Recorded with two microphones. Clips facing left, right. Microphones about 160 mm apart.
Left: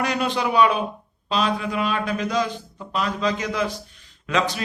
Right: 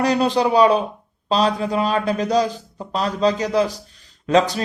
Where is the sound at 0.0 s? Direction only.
35° right (ahead or behind).